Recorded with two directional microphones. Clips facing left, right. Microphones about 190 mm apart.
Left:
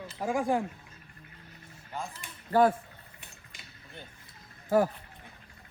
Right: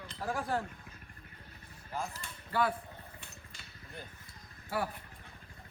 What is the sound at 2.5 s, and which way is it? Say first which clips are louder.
Speech: left 9 dB; 45° left (ahead or behind).